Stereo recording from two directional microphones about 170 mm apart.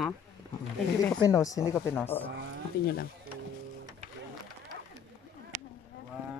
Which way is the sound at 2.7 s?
70° left (ahead or behind).